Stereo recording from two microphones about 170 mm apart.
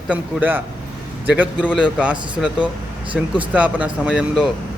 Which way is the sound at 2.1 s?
30° right (ahead or behind).